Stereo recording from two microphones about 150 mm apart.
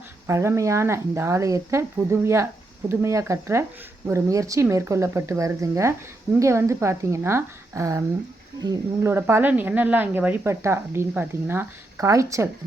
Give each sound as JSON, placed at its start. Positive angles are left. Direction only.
{"t": 0.3, "sound": "a woman's voice", "side_deg": -20}